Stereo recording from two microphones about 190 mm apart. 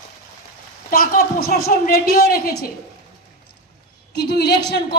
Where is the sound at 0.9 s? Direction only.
50° left (ahead or behind).